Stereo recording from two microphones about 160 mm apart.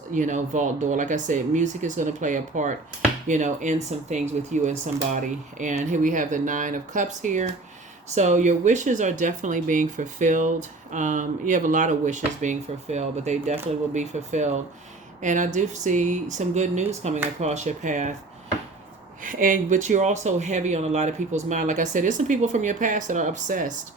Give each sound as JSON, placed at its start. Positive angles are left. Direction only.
{"t": 0.1, "sound": "speech", "side_deg": -50}
{"t": 19.2, "sound": "speech", "side_deg": -55}